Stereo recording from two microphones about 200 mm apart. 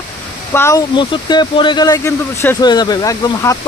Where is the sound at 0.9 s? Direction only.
25° left (ahead or behind).